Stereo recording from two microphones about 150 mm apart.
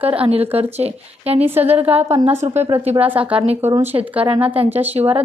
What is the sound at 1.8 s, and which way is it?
Speech, 10° right (ahead or behind).